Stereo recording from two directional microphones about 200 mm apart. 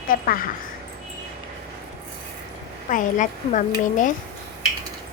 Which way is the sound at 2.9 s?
40° left (ahead or behind).